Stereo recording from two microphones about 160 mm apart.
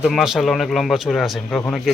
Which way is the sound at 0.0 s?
Centre (ahead or behind).